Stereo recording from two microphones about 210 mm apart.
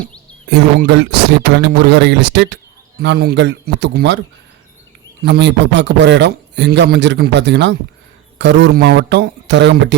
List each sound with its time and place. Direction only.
0.9 s a man's voice: 55° right (ahead or behind)
5.2 s a man's voice: 55° right (ahead or behind)